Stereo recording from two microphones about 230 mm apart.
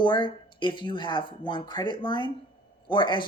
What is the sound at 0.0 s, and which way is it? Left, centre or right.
Speech, centre.